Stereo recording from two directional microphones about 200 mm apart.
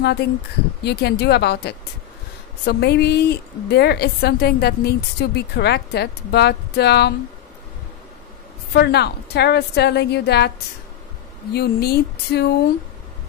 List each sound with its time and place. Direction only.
0.0 s a woman's voice: 55° left (ahead or behind)
8.7 s a woman's voice: 55° left (ahead or behind)
11.5 s a woman's voice: 55° left (ahead or behind)